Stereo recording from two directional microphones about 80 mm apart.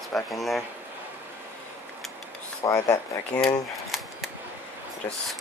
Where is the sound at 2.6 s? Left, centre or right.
Left.